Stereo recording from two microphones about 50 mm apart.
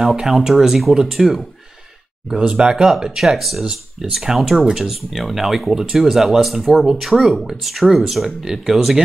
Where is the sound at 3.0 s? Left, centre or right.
Centre.